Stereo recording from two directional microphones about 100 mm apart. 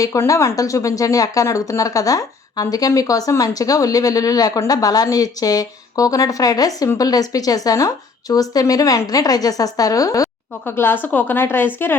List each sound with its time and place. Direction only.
0.0 s speech: 35° left (ahead or behind)
10.7 s a woman's voice: 20° left (ahead or behind)